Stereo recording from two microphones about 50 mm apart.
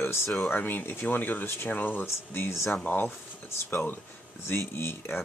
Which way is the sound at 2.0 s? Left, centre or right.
Left.